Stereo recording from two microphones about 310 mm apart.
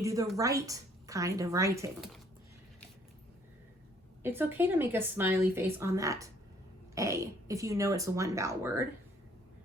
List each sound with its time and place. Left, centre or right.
0.0 s a woman's voice: centre
4.2 s a woman's voice: centre